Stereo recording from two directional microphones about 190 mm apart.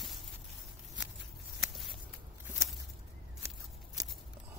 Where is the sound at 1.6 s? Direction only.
Centre (ahead or behind).